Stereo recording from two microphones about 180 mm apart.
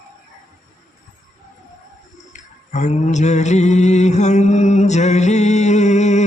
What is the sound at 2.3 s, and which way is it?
Music, 40° left (ahead or behind).